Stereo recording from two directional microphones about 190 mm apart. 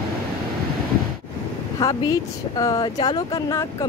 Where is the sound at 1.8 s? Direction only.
20° left (ahead or behind).